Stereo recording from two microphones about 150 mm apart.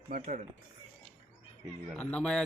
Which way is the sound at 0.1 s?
55° right (ahead or behind).